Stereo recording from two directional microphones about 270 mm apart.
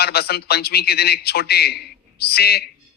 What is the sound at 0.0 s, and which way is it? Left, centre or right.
A man's voice, left.